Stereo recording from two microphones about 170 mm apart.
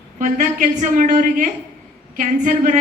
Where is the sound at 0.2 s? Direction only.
50° right (ahead or behind).